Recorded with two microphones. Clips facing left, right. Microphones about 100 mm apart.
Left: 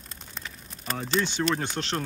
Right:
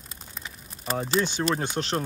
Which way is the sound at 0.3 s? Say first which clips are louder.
Even; 5° right (ahead or behind).